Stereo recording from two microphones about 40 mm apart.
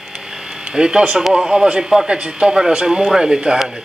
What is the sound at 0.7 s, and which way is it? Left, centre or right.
Speech, centre.